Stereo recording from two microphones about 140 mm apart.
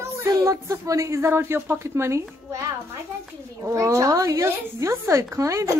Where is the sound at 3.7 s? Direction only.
20° right (ahead or behind).